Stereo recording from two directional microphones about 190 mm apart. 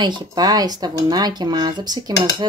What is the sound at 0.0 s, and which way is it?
Speech, 20° right (ahead or behind).